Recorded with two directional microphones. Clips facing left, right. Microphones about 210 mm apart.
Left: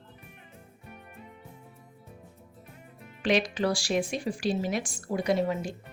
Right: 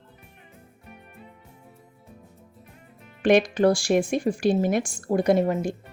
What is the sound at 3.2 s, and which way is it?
Speech, 50° right (ahead or behind).